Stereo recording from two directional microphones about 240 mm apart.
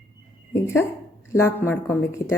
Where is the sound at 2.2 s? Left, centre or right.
Left.